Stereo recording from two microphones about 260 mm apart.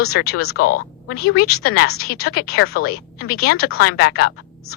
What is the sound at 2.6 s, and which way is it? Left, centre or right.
A woman's voice, left.